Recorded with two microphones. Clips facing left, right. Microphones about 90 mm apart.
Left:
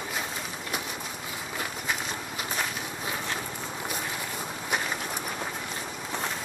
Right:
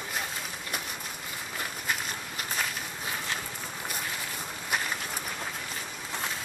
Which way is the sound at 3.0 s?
10° left (ahead or behind).